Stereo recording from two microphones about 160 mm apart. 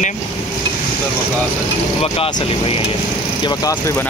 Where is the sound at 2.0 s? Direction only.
35° left (ahead or behind).